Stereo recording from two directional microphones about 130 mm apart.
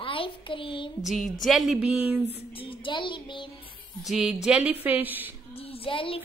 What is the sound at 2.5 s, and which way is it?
Speech, 40° left (ahead or behind).